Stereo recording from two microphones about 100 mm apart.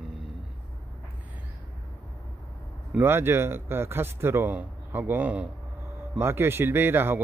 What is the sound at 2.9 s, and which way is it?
Speech, 25° right (ahead or behind).